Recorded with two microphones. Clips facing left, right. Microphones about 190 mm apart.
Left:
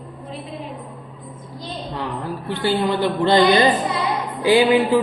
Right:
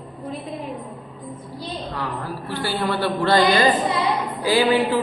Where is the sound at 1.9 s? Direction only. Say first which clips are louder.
Left 5 dB; 20° left (ahead or behind).